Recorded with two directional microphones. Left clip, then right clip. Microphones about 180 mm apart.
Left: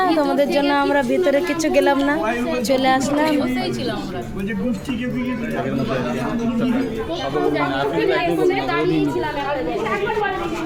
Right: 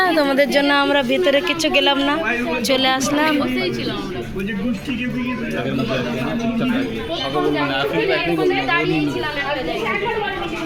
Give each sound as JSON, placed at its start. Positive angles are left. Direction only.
{"t": 0.0, "sound": "speech", "side_deg": 0}
{"t": 1.3, "sound": "a woman's voice", "side_deg": 15}